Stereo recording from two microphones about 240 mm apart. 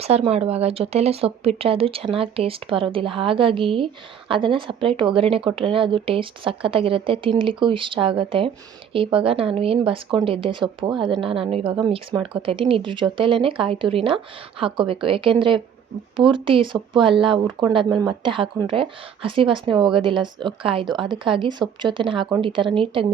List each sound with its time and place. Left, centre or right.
0.0 s speech: right